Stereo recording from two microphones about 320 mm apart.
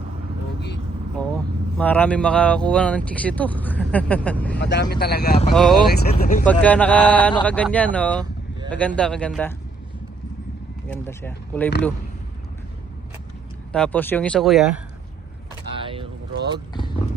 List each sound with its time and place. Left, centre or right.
1.8 s speech: centre
4.5 s speech: left
5.5 s speech: centre
5.9 s speech: left
6.4 s speech: centre
10.8 s speech: centre
13.7 s speech: centre
15.7 s boat: centre